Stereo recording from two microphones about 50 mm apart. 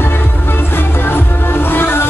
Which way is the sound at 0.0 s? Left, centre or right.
Left.